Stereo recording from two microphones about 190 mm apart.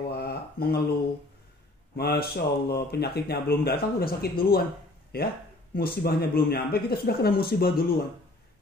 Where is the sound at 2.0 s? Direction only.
55° left (ahead or behind).